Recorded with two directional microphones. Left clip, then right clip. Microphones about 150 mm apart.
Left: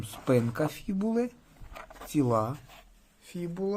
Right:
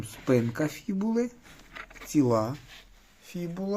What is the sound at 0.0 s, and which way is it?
Speech, 20° left (ahead or behind).